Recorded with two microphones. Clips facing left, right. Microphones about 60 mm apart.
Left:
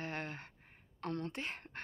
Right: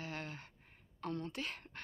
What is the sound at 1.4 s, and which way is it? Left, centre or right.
Speech, left.